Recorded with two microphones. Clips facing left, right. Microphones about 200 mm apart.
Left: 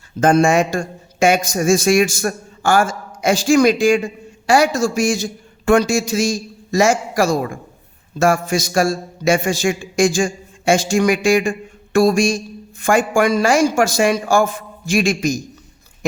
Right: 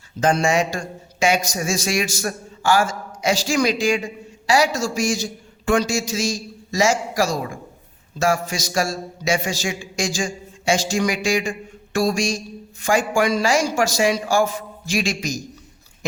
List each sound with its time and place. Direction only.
0.2 s speech: 50° left (ahead or behind)